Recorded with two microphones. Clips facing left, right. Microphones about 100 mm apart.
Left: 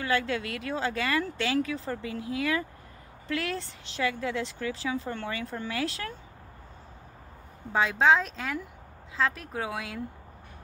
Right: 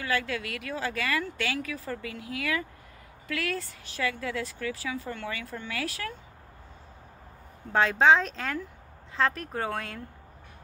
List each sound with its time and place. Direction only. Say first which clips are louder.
0.0 s speech: left 2 dB; 25° left (ahead or behind)
7.7 s speech: right 2 dB; 5° left (ahead or behind)